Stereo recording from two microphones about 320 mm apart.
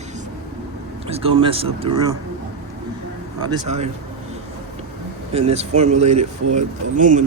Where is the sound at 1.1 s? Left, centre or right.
Centre.